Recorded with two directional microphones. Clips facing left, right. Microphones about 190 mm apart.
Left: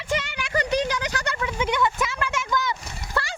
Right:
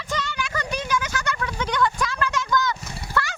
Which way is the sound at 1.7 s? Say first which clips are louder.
Right 4 dB; 25° left (ahead or behind).